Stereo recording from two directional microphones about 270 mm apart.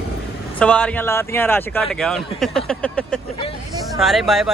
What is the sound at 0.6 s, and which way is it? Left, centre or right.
Speech, centre.